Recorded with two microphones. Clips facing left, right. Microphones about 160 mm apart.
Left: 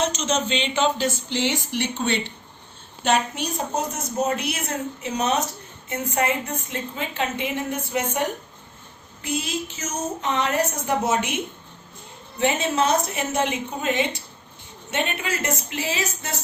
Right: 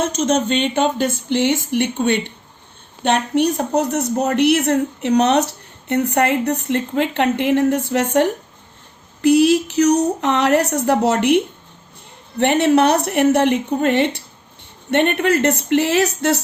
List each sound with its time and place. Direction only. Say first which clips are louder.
0.0 s a woman's voice: right 6 dB; 50° right (ahead or behind); by 16.4 s 75° right (ahead or behind)